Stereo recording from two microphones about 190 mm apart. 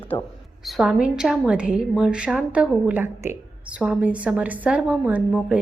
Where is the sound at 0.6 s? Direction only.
5° right (ahead or behind).